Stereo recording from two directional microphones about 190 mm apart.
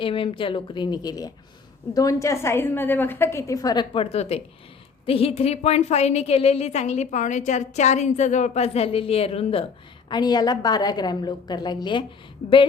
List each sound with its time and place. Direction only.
0.0 s a woman's voice: 30° left (ahead or behind)